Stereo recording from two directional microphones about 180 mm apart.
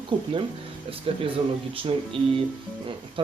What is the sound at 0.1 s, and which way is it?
Speech, 30° right (ahead or behind).